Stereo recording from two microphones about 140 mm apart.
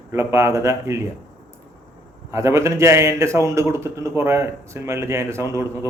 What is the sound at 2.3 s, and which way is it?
A man's voice, 20° right (ahead or behind).